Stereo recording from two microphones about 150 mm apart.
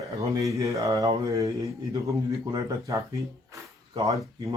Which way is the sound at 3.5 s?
25° right (ahead or behind).